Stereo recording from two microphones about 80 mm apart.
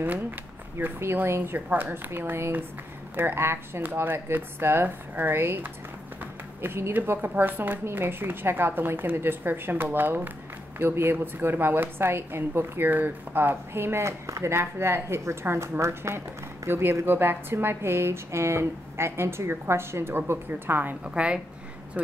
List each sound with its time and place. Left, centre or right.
0.7 s a woman's voice: right
21.0 s a woman's voice: centre